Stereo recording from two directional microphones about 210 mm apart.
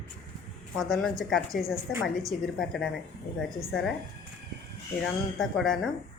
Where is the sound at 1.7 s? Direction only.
15° right (ahead or behind).